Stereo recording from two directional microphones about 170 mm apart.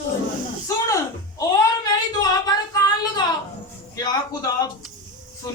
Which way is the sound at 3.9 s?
25° left (ahead or behind).